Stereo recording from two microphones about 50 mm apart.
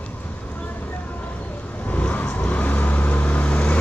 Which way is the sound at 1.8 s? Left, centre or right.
Left.